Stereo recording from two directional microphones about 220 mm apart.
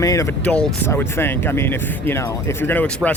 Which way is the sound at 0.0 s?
15° left (ahead or behind).